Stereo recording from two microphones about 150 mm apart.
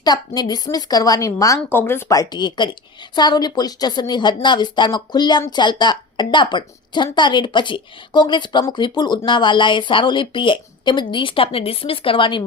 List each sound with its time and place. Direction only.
0.0 s a woman's voice: 25° left (ahead or behind)